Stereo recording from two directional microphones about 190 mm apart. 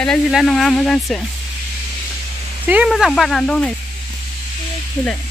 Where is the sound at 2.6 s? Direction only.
5° right (ahead or behind).